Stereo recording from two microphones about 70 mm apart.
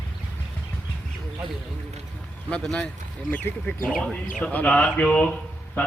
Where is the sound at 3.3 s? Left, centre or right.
Left.